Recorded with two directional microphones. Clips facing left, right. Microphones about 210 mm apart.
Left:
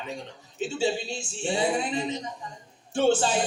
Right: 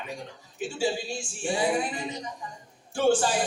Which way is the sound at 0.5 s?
25° left (ahead or behind).